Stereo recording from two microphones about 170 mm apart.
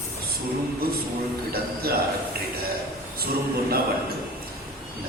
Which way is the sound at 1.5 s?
65° right (ahead or behind).